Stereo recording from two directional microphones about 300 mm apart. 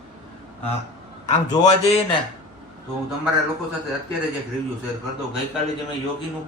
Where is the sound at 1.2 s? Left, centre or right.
Left.